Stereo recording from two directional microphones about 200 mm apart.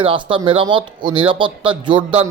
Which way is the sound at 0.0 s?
25° right (ahead or behind).